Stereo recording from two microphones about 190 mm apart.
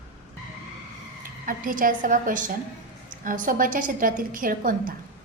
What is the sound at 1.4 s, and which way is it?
A woman's voice, 45° right (ahead or behind).